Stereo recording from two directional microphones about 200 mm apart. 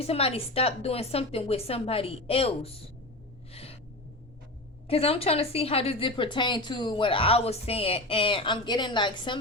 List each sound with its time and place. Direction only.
0.0 s a woman's voice: 30° left (ahead or behind)
3.5 s gasp: 30° left (ahead or behind)
4.9 s a woman's voice: 30° left (ahead or behind)